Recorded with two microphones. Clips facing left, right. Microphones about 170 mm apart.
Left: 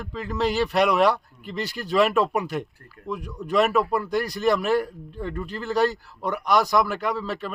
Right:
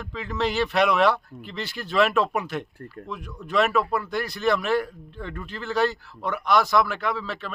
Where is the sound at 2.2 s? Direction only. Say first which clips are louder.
Left 2 dB; 10° left (ahead or behind).